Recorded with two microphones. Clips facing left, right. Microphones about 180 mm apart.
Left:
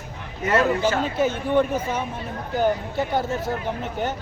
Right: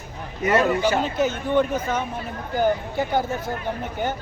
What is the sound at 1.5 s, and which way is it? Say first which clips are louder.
Speech: even; 10° left (ahead or behind).